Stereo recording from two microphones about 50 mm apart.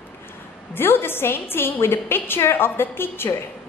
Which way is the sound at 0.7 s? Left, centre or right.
Left.